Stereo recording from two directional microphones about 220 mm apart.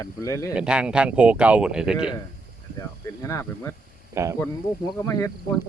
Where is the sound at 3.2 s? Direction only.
10° left (ahead or behind).